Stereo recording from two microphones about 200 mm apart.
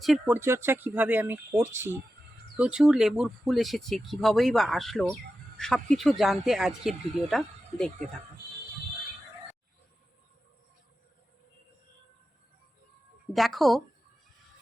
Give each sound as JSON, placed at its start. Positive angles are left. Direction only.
{"t": 0.0, "sound": "speech", "side_deg": 0}
{"t": 0.3, "sound": "speech", "side_deg": -10}
{"t": 13.3, "sound": "speech", "side_deg": 0}